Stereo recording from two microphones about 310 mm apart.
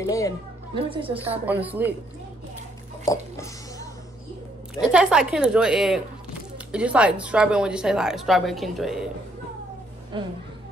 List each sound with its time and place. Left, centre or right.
0.0 s speech: centre
0.7 s a woman's voice: centre
1.4 s a woman's voice: centre
3.1 s a sound: centre
4.7 s a woman's voice: centre
10.1 s a woman's voice: centre